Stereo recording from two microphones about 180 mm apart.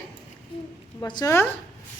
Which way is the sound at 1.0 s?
25° left (ahead or behind).